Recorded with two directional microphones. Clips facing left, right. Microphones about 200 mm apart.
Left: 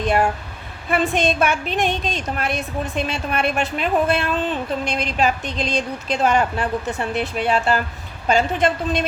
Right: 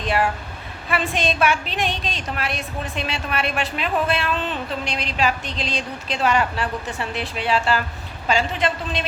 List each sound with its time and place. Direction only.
0.0 s speech: 50° left (ahead or behind)